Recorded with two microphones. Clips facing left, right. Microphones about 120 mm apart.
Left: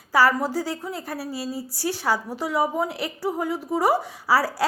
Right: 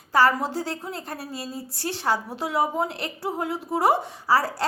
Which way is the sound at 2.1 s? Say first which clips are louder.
Right 1 dB; centre (ahead or behind).